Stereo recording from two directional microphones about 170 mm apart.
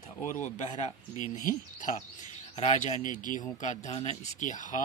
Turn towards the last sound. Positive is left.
turn(degrees=50)  # may be behind; listen again after turning